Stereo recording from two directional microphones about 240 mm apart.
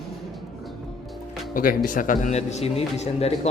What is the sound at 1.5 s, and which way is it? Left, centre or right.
Speech, left.